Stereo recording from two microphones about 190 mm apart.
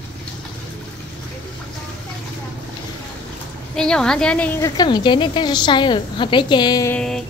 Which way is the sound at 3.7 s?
5° left (ahead or behind).